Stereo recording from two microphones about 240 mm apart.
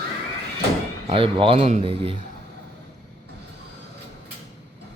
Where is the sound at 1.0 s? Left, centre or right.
Right.